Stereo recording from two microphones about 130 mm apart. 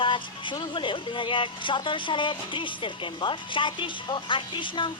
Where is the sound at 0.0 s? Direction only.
40° left (ahead or behind).